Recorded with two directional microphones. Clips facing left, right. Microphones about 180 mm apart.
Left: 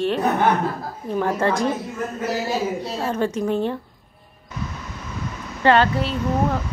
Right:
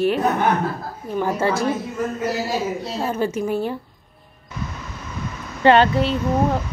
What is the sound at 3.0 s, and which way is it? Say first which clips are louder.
Speech: even; 5° right (ahead or behind).